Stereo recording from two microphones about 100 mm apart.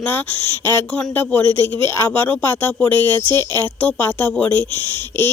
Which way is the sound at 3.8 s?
15° left (ahead or behind).